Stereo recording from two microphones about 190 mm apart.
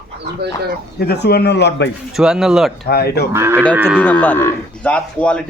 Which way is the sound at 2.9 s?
55° left (ahead or behind).